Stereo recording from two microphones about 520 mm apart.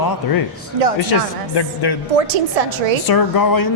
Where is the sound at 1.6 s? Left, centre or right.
Left.